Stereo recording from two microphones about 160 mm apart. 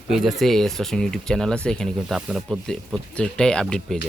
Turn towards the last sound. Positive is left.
turn(degrees=5)  # may be behind; listen again after turning